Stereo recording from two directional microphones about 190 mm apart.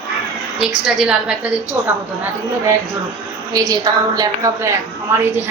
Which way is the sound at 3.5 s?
20° right (ahead or behind).